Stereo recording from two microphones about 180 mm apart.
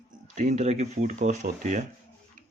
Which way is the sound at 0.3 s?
40° right (ahead or behind).